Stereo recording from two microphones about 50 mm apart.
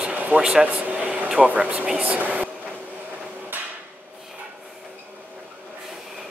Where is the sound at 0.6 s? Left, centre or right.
Right.